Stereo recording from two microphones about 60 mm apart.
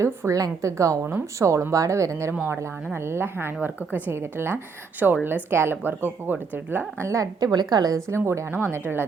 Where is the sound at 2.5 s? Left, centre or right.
Right.